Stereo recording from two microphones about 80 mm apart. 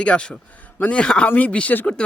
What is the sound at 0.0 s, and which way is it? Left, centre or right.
Speech, centre.